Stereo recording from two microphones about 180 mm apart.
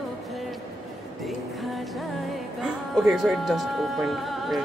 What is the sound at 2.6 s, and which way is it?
Speech, 5° right (ahead or behind).